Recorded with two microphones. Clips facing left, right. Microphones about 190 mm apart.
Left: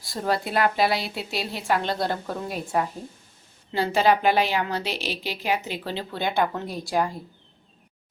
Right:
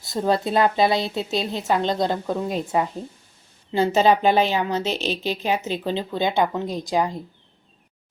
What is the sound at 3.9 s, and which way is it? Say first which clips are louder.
Speech: right 2 dB; 20° right (ahead or behind).